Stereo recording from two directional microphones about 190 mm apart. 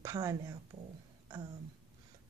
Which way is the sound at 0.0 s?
15° right (ahead or behind).